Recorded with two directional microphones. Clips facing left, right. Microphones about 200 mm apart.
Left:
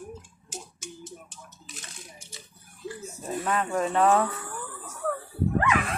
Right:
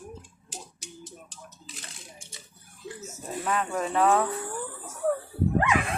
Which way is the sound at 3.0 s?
Centre (ahead or behind).